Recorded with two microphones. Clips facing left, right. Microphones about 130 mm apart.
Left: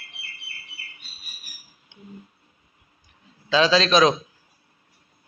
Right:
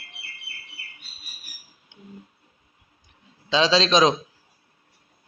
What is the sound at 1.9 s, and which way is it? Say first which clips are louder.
Wild animals: left 1 dB; 10° right (ahead or behind).